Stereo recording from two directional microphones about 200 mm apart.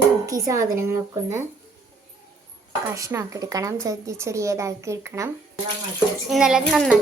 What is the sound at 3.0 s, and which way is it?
A woman's voice, 15° right (ahead or behind).